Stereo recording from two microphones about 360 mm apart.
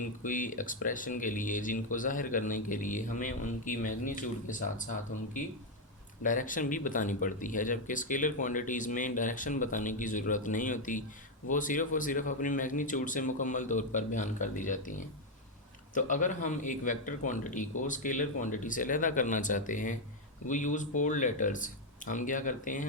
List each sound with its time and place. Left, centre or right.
0.0 s speech: left
6.2 s speech: left
16.0 s speech: left